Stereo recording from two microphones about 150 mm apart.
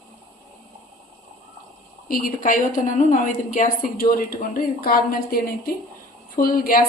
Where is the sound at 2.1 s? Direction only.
65° left (ahead or behind).